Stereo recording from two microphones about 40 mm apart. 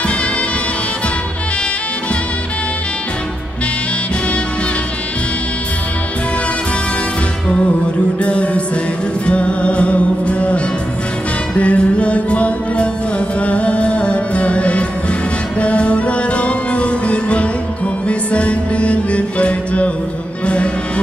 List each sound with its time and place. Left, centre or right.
8.2 s music: left